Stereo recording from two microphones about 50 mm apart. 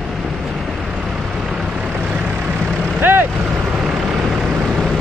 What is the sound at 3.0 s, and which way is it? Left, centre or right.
Vehicle, right.